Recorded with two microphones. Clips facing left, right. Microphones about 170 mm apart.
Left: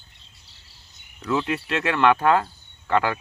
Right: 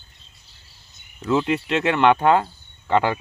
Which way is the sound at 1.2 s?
25° right (ahead or behind).